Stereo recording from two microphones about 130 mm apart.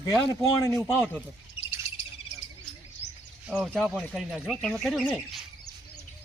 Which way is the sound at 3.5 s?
10° right (ahead or behind).